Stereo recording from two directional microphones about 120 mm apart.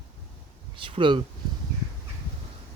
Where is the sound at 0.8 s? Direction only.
45° right (ahead or behind).